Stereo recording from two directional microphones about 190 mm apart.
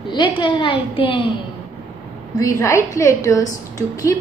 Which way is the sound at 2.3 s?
15° left (ahead or behind).